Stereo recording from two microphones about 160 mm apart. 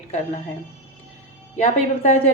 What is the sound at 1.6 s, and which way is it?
Speech, 40° left (ahead or behind).